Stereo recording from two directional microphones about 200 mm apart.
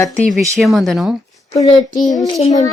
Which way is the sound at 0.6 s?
Centre (ahead or behind).